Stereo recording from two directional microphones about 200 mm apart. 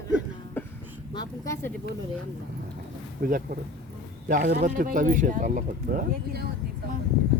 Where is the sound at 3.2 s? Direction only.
45° right (ahead or behind).